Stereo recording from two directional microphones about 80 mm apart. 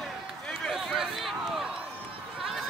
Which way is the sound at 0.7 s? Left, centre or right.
Centre.